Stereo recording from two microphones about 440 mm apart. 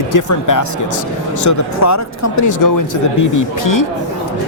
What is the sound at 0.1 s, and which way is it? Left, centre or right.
Speech, left.